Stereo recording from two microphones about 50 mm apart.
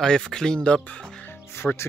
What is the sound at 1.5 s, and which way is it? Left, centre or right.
Speech, left.